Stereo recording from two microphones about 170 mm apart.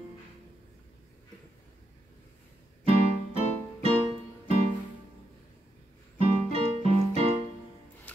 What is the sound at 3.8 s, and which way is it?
Music, 35° right (ahead or behind).